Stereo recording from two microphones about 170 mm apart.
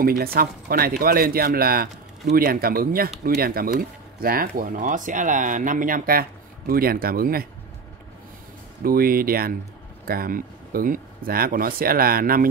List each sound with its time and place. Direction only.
0.0 s speech: 60° right (ahead or behind)
8.8 s speech: 60° right (ahead or behind)